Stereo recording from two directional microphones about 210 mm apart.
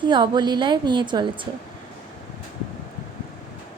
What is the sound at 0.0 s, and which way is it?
A woman's voice, 20° right (ahead or behind).